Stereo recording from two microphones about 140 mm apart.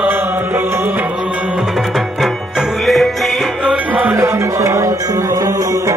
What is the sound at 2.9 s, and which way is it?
Music, centre (ahead or behind).